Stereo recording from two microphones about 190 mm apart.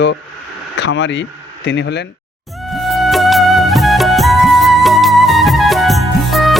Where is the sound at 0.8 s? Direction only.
75° left (ahead or behind).